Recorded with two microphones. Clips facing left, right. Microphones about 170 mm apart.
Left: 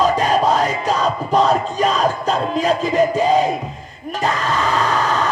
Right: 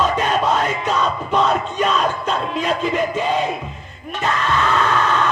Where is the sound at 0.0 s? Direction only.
35° left (ahead or behind).